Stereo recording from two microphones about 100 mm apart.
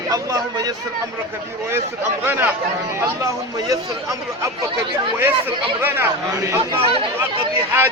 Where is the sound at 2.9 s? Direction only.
30° right (ahead or behind).